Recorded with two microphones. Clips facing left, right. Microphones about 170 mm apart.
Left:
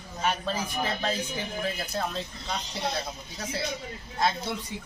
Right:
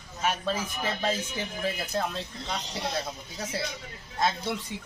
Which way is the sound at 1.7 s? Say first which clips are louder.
Right 2 dB; 5° right (ahead or behind).